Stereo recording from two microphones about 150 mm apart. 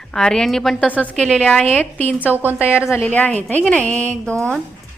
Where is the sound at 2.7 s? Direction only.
15° left (ahead or behind).